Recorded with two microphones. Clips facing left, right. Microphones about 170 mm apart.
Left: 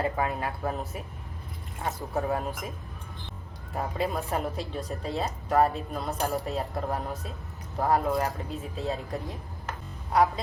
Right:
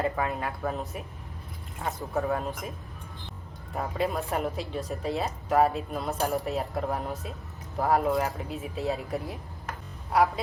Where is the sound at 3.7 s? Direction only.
Centre (ahead or behind).